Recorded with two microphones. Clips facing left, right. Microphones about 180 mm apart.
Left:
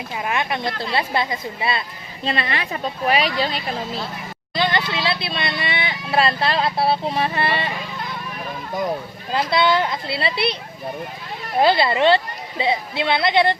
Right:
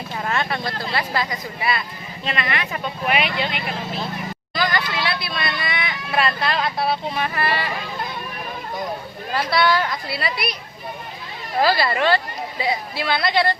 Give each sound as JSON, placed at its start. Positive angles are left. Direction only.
{"t": 0.3, "sound": "speech", "side_deg": 15}
{"t": 9.3, "sound": "speech", "side_deg": 20}
{"t": 11.6, "sound": "a woman's voice", "side_deg": 20}